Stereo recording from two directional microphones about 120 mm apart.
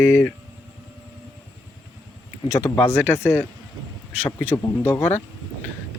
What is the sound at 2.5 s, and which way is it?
A man's voice, 20° left (ahead or behind).